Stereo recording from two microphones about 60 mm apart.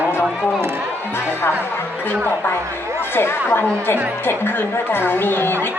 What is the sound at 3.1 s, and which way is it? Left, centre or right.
A man's voice, left.